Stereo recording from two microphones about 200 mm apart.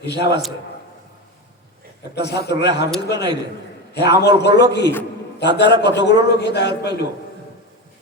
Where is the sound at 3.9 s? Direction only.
55° left (ahead or behind).